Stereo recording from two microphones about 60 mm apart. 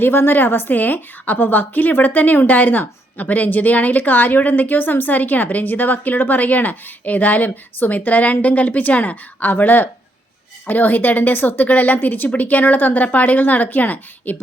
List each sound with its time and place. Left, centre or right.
0.0 s a woman's voice: left